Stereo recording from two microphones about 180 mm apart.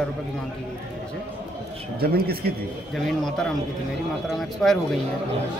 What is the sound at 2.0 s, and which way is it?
Speech, 60° right (ahead or behind).